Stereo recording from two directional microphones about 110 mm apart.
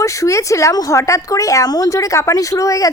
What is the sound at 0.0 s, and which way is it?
Speech, 30° left (ahead or behind).